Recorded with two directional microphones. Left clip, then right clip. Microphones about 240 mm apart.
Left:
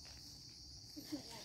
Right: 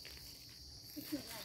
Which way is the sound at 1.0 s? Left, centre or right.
Right.